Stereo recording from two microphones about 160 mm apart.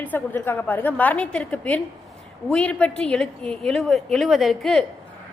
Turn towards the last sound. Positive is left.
turn(degrees=0)  # may be behind; listen again after turning